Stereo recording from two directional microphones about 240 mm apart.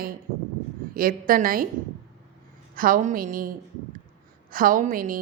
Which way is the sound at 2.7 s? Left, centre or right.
Right.